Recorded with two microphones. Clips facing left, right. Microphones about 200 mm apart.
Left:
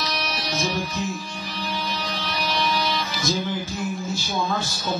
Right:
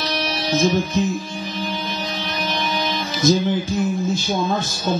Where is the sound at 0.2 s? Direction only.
25° right (ahead or behind).